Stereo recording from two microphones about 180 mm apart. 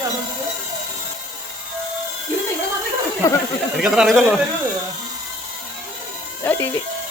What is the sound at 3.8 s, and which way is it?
Speech, 5° right (ahead or behind).